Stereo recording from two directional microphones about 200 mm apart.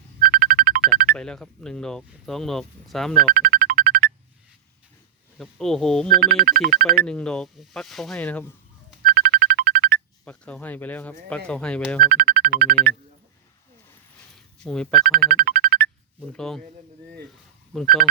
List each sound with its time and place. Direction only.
0.2 s music: 50° right (ahead or behind)
1.1 s speech: 5° left (ahead or behind)
3.3 s music: 45° right (ahead or behind)
5.4 s speech: centre (ahead or behind)
6.1 s speech: 50° right (ahead or behind)
7.0 s speech: 5° left (ahead or behind)
9.0 s music: 45° right (ahead or behind)
10.2 s speech: 5° left (ahead or behind)
12.1 s speech: 50° right (ahead or behind)
14.3 s a sound: 5° left (ahead or behind)
15.1 s music: 50° right (ahead or behind)
16.3 s speech: 5° left (ahead or behind)
17.7 s speech: 5° left (ahead or behind)